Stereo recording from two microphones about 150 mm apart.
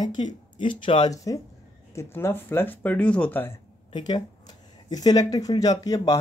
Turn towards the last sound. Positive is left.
turn(degrees=25)  # may be behind; listen again after turning